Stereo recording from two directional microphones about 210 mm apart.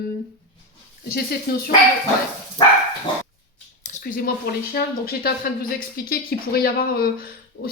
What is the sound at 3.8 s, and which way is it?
Speech, 40° left (ahead or behind).